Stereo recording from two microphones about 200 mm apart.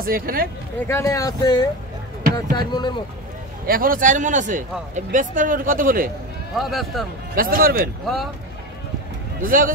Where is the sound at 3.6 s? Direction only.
45° right (ahead or behind).